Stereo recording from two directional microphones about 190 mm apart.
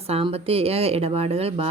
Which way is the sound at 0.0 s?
30° right (ahead or behind).